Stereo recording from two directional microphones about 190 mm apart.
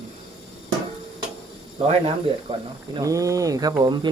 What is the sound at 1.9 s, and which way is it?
Speech, 30° right (ahead or behind).